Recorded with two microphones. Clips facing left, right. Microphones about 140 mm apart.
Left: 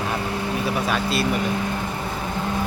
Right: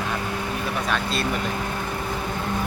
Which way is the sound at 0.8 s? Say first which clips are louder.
Left 3 dB; 5° left (ahead or behind).